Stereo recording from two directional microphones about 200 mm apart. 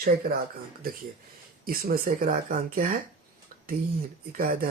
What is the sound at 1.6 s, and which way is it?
Speech, 45° right (ahead or behind).